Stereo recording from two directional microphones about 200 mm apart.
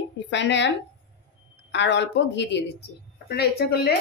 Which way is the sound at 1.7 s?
60° left (ahead or behind).